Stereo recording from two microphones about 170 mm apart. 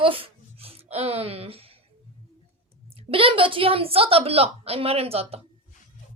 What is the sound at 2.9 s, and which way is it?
A woman's voice, 35° right (ahead or behind).